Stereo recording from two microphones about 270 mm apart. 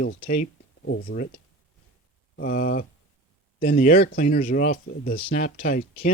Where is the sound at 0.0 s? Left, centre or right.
Left.